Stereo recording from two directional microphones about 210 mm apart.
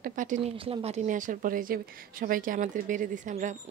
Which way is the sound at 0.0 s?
40° right (ahead or behind).